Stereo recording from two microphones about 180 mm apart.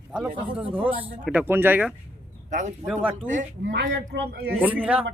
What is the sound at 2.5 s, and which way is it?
Speech, 40° right (ahead or behind).